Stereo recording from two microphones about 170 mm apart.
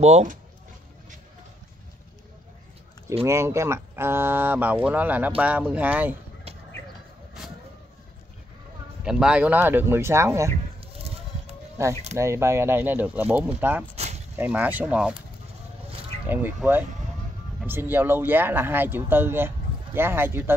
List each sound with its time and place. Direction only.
0.0 s speech: 45° right (ahead or behind)
3.3 s speech: 15° right (ahead or behind)
9.0 s speech: 5° right (ahead or behind)
11.8 s speech: 15° right (ahead or behind)
16.3 s speech: 10° right (ahead or behind)